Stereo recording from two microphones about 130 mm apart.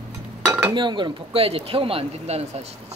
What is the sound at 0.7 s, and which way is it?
Speech, 35° right (ahead or behind).